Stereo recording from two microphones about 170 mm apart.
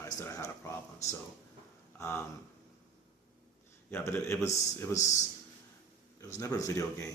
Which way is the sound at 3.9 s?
15° left (ahead or behind).